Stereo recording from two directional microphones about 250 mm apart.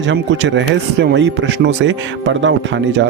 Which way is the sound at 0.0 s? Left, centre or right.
Right.